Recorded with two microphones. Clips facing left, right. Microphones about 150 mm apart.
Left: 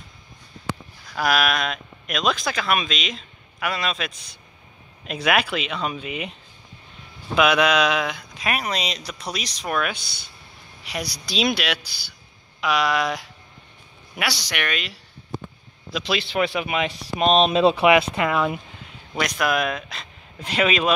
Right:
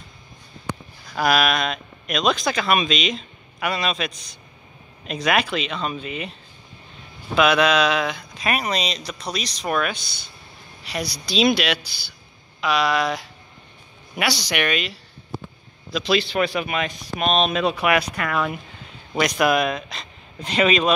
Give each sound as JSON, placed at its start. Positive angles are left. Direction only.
{"t": 1.1, "sound": "speech", "side_deg": 0}
{"t": 7.3, "sound": "speech", "side_deg": 10}
{"t": 16.3, "sound": "speech", "side_deg": 20}
{"t": 16.9, "sound": "speech", "side_deg": 30}
{"t": 19.1, "sound": "speech", "side_deg": -5}